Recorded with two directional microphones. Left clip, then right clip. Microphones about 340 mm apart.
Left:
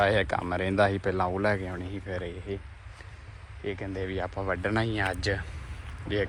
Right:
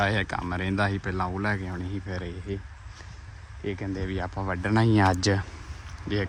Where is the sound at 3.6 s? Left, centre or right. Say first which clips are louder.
Right 1 dB; centre.